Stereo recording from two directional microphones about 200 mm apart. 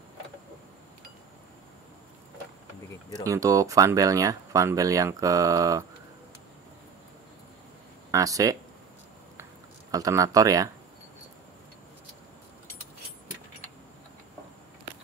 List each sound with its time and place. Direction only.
3.1 s speech: 15° right (ahead or behind)
8.1 s speech: 15° right (ahead or behind)
9.4 s a sound: 15° right (ahead or behind)